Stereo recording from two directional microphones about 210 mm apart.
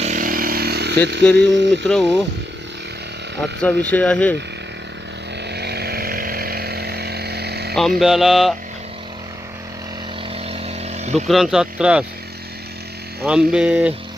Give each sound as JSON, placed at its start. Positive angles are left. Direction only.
{"t": 0.0, "sound": "motorcycle", "side_deg": -40}
{"t": 1.2, "sound": "speech", "side_deg": 5}
{"t": 3.6, "sound": "speech", "side_deg": 5}
{"t": 5.5, "sound": "vehicle", "side_deg": -50}
{"t": 7.8, "sound": "speech", "side_deg": 0}
{"t": 10.3, "sound": "vehicle", "side_deg": -30}
{"t": 11.3, "sound": "speech", "side_deg": 0}
{"t": 13.2, "sound": "speech", "side_deg": -5}